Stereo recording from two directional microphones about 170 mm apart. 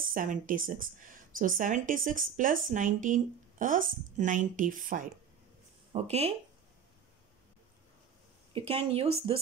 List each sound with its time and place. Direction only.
0.1 s speech: 50° right (ahead or behind)
5.9 s speech: 40° right (ahead or behind)
8.5 s speech: 35° right (ahead or behind)